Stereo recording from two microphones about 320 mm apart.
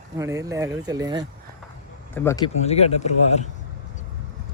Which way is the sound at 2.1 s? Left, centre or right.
Centre.